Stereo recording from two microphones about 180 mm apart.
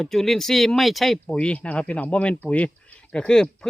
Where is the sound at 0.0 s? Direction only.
Centre (ahead or behind).